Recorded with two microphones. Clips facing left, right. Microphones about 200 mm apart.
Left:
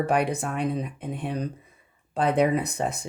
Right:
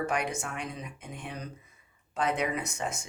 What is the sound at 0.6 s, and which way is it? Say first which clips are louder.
Speech: left 11 dB; 60° left (ahead or behind).